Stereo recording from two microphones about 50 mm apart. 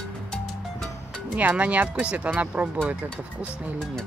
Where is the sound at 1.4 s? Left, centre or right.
Right.